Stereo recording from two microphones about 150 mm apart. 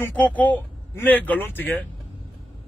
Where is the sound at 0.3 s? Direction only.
10° left (ahead or behind).